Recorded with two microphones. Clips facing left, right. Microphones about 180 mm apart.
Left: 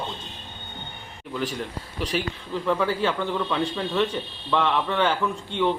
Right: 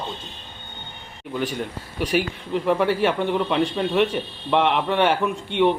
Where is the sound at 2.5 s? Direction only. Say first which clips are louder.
Right 4 dB; 20° right (ahead or behind).